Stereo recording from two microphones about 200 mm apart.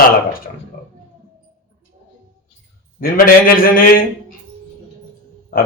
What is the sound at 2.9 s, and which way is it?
Speech, 45° left (ahead or behind).